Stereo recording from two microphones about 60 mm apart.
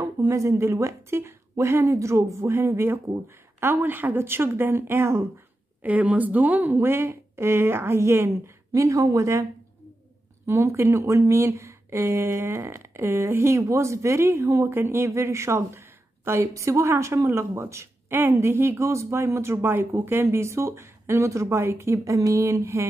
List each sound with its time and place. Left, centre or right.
0.0 s speech: right
5.8 s speech: right
8.7 s speech: right
10.4 s speech: right